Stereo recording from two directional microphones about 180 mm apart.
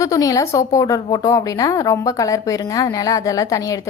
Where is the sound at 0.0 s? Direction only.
20° left (ahead or behind).